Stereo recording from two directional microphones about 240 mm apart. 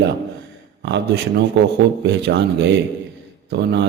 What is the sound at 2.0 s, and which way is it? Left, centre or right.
A man's voice, right.